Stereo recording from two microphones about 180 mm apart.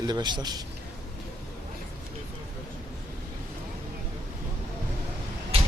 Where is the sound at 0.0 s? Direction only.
25° right (ahead or behind).